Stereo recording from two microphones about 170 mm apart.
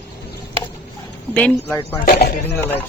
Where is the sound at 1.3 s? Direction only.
5° left (ahead or behind).